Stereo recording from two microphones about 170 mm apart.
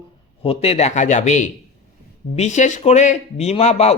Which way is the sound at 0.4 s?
35° left (ahead or behind).